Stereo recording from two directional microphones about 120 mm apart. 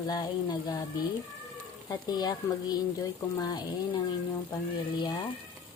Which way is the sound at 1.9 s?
35° left (ahead or behind).